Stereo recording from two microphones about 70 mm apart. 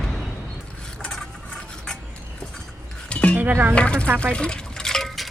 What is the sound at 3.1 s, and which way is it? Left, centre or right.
Dishes, centre.